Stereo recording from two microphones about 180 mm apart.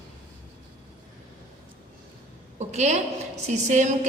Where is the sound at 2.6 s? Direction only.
40° right (ahead or behind).